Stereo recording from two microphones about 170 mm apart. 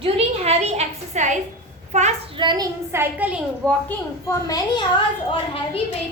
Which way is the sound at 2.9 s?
10° right (ahead or behind).